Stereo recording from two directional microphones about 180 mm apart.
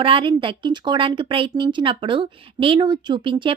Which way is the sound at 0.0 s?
30° right (ahead or behind).